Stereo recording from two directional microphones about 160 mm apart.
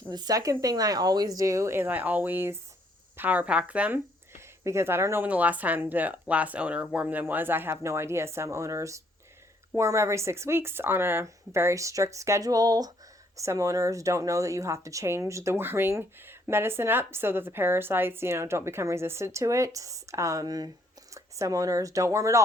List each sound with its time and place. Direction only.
0.1 s speech: 25° right (ahead or behind)